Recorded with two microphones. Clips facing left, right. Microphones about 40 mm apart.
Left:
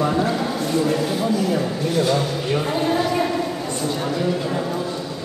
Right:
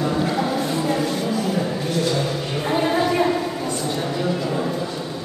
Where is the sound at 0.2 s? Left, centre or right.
Centre.